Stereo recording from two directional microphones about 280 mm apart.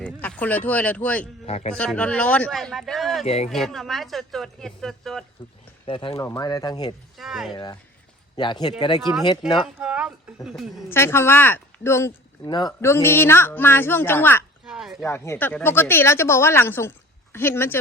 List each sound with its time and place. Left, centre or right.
0.0 s speech: centre
1.5 s speech: left
1.7 s speech: centre
3.2 s speech: left
3.5 s speech: centre
5.8 s speech: centre
7.2 s speech: centre
7.5 s speech: centre
9.6 s speech: centre
15.0 s speech: centre